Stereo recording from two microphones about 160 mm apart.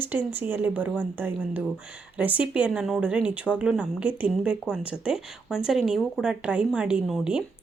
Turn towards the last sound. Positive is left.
turn(degrees=-5)  # may be behind; listen again after turning